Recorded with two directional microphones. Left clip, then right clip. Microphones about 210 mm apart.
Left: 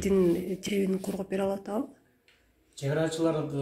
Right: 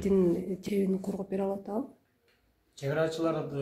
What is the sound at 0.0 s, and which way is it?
Speech, centre (ahead or behind).